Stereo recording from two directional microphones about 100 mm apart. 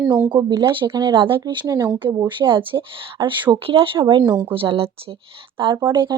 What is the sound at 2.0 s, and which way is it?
Speech, 50° right (ahead or behind).